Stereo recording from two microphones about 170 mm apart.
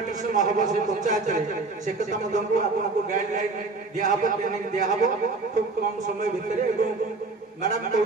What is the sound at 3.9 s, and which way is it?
Speech, 50° right (ahead or behind).